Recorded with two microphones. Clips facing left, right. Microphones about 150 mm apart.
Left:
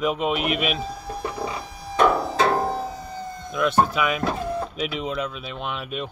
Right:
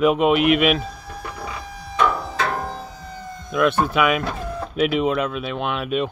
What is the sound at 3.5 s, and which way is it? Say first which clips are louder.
Speech: right 2 dB; 60° right (ahead or behind).